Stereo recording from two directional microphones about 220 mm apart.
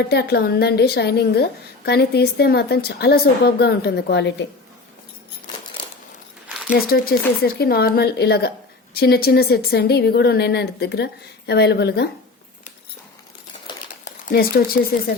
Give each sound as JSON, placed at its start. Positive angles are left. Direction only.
{"t": 0.0, "sound": "speech", "side_deg": 45}
{"t": 6.7, "sound": "speech", "side_deg": 40}
{"t": 13.7, "sound": "crumpling", "side_deg": 20}
{"t": 14.0, "sound": "speech", "side_deg": 40}